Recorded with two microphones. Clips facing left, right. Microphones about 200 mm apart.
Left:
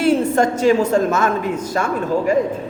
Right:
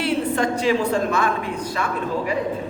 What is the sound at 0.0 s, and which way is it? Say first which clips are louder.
A man's voice: left 6 dB; 45° left (ahead or behind).